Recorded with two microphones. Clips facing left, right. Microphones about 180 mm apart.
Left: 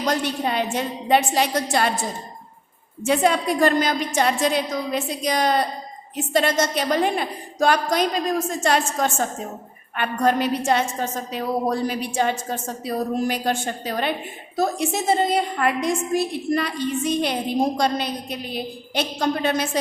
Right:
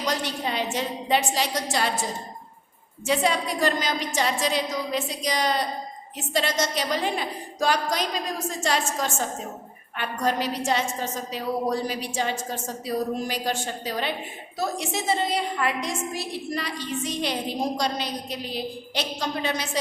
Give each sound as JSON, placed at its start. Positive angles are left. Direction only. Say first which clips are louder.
{"t": 0.0, "sound": "a woman's voice", "louder": "left 5 dB", "side_deg": 55}
{"t": 3.1, "sound": "a woman's voice", "louder": "left 5 dB", "side_deg": 55}